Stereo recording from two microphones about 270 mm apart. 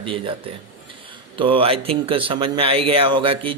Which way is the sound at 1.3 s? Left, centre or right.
Centre.